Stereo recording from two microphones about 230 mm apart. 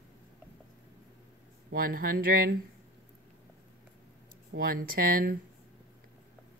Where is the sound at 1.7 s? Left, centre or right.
Right.